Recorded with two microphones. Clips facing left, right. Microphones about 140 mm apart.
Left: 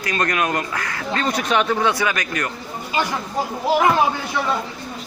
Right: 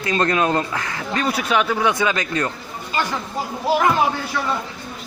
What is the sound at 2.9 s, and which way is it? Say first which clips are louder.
Speech: left 1 dB; 15° left (ahead or behind).